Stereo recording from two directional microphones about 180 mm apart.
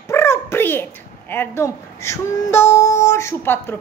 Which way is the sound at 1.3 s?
15° left (ahead or behind).